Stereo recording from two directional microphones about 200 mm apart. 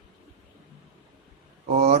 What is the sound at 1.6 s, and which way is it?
Speech, 45° right (ahead or behind).